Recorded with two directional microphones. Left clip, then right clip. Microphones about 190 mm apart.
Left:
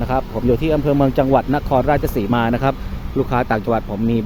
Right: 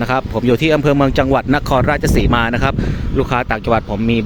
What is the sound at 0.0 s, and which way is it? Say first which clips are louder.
Speech: right 3 dB; 10° right (ahead or behind).